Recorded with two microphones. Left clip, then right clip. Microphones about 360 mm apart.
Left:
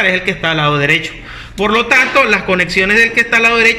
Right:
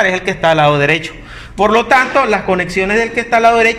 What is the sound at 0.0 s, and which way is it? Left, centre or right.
A man's voice, right.